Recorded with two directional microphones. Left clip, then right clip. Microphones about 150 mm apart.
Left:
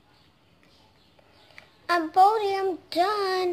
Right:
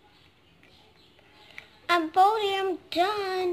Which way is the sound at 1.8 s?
20° left (ahead or behind).